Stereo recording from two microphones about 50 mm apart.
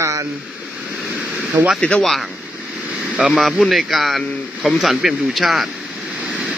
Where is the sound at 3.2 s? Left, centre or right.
Centre.